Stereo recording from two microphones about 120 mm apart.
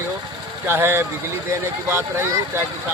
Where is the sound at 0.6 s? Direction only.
20° right (ahead or behind).